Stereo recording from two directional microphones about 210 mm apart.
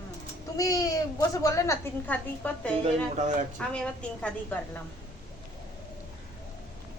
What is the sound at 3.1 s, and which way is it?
Speech, 35° right (ahead or behind).